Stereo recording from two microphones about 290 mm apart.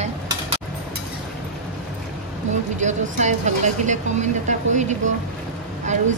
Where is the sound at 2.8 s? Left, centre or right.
Right.